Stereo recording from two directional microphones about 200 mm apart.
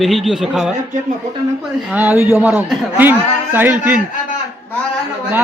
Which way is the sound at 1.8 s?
10° right (ahead or behind).